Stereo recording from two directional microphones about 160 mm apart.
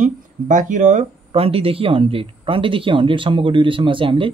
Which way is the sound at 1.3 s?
35° right (ahead or behind).